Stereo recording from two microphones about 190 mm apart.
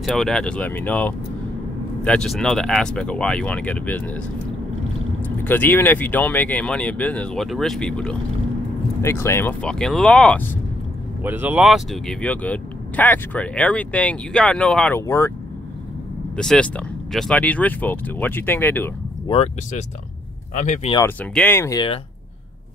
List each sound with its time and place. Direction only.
0.0 s speech: centre (ahead or behind)
5.4 s speech: 10° left (ahead or behind)
11.2 s speech: 10° right (ahead or behind); by 15.3 s 15° left (ahead or behind)
16.3 s speech: 5° left (ahead or behind)
19.2 s speech: 30° left (ahead or behind)
21.0 s speech: 10° left (ahead or behind); by 22.0 s 25° left (ahead or behind)